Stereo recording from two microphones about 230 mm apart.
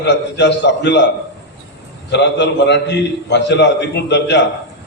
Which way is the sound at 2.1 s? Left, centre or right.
Left.